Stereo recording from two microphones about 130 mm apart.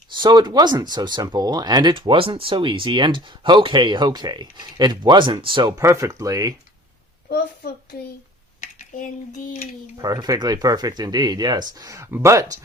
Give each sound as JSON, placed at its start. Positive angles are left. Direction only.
{"t": 0.1, "sound": "speech", "side_deg": -35}
{"t": 5.7, "sound": "speech", "side_deg": -20}
{"t": 8.6, "sound": "speech", "side_deg": 85}
{"t": 10.0, "sound": "speech", "side_deg": -30}